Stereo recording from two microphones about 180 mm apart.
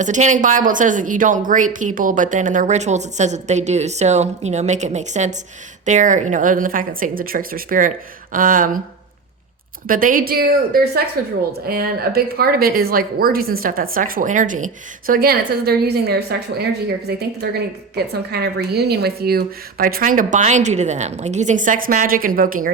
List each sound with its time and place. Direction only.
0.0 s a woman's voice: 45° right (ahead or behind)
9.8 s a woman's voice: 50° right (ahead or behind)